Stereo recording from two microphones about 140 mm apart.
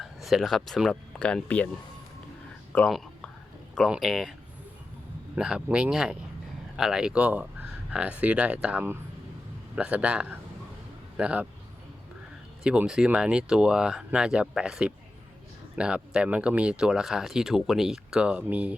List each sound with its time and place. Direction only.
0.0 s speech: centre (ahead or behind)
2.7 s speech: 5° left (ahead or behind)
12.6 s speech: 5° right (ahead or behind)